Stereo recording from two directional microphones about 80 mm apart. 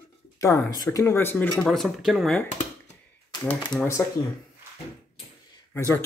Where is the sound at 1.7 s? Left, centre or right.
Centre.